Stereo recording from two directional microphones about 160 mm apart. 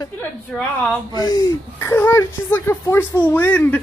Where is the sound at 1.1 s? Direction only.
25° left (ahead or behind).